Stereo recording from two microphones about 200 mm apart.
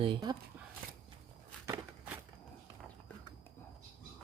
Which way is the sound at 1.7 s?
10° right (ahead or behind).